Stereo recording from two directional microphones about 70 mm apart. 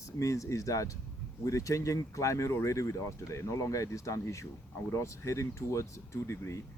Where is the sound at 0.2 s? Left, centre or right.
Left.